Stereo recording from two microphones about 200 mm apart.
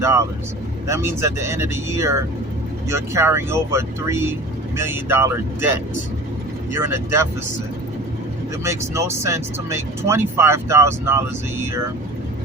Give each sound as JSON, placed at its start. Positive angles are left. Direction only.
{"t": 0.0, "sound": "speech", "side_deg": -15}
{"t": 6.7, "sound": "speech", "side_deg": -15}
{"t": 8.6, "sound": "speech", "side_deg": -15}